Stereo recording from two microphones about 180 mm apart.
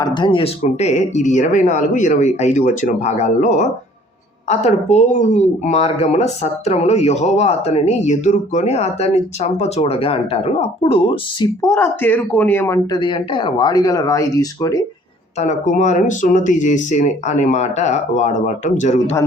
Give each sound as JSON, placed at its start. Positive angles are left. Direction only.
{"t": 0.0, "sound": "speech", "side_deg": 25}
{"t": 11.7, "sound": "speech", "side_deg": 10}
{"t": 15.4, "sound": "speech", "side_deg": 40}